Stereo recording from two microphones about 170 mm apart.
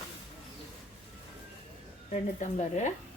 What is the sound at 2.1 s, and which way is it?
Speech, 45° left (ahead or behind).